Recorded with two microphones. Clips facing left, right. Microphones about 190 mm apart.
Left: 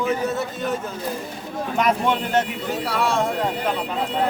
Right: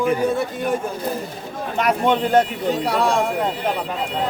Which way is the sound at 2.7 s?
15° right (ahead or behind).